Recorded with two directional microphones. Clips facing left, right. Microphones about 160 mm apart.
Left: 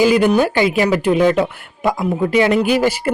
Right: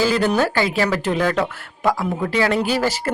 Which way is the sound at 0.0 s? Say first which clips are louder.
Left 5 dB; 15° left (ahead or behind).